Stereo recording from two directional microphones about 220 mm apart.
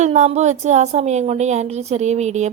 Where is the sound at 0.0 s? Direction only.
30° right (ahead or behind).